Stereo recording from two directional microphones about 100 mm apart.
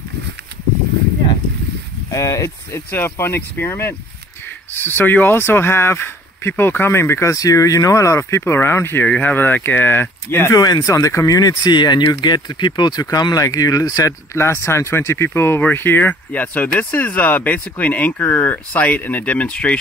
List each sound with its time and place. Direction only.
2.0 s speech: 35° left (ahead or behind)
10.6 s speech: 40° left (ahead or behind); by 19.8 s 10° left (ahead or behind)